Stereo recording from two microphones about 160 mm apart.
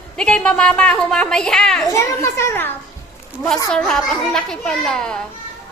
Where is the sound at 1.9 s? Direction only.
20° left (ahead or behind).